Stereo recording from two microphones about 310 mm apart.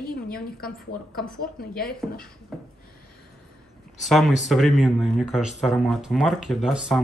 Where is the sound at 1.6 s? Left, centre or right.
Left.